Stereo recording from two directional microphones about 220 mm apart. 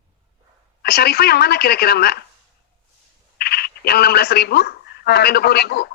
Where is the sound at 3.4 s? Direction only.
45° left (ahead or behind).